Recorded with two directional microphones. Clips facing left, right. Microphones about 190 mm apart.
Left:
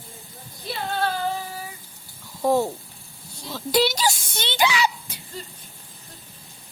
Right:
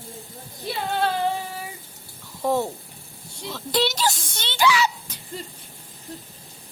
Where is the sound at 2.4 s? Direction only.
5° left (ahead or behind).